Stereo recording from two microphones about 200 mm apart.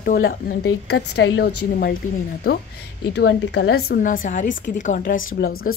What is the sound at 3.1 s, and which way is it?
A woman's voice, 60° left (ahead or behind).